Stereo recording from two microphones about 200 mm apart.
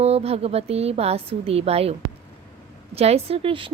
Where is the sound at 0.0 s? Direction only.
30° right (ahead or behind).